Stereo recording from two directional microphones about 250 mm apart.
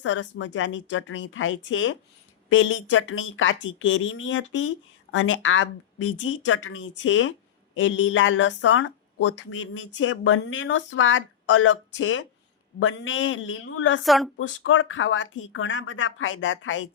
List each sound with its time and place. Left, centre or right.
0.0 s speech: left
14.0 s speech: centre
14.3 s speech: left